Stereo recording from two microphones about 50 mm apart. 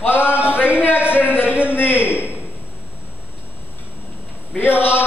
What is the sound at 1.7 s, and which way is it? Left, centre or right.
Speech, left.